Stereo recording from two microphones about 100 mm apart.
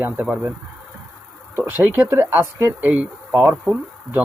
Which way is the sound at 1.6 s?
20° right (ahead or behind).